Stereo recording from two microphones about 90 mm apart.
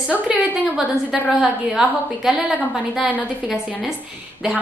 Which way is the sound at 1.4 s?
5° right (ahead or behind).